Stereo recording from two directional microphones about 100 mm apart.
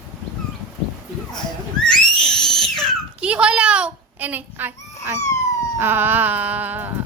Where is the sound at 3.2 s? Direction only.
10° right (ahead or behind).